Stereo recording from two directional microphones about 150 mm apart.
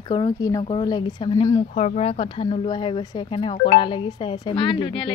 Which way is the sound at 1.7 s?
50° left (ahead or behind).